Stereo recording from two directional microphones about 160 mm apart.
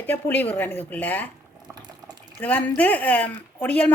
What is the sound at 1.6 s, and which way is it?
Boiling, 25° right (ahead or behind).